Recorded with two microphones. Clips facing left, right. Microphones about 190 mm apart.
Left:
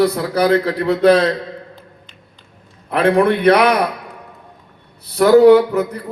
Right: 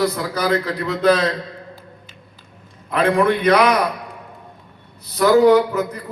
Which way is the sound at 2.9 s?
60° left (ahead or behind).